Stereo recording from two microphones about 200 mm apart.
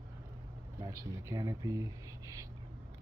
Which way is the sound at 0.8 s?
15° right (ahead or behind).